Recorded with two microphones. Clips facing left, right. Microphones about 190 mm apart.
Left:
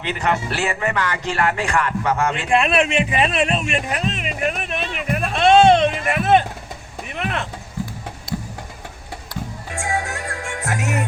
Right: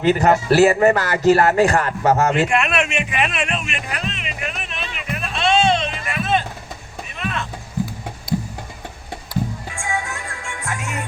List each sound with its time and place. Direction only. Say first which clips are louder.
0.0 s a man's voice: right 7 dB; 40° right (ahead or behind)
2.5 s a sound: left 3 dB; 30° left (ahead or behind); by 7.4 s 65° left (ahead or behind)
9.7 s music: left 3 dB; 40° left (ahead or behind)